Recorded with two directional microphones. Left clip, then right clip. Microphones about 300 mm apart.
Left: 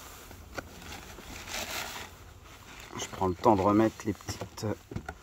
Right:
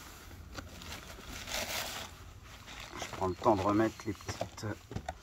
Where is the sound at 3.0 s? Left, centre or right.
Left.